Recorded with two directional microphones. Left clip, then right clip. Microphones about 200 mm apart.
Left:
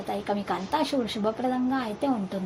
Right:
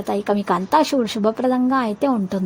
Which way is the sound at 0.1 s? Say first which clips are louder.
Right 9 dB; 45° right (ahead or behind).